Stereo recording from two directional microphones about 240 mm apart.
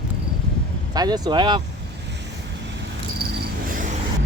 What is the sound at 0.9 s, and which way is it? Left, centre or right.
Speech, centre.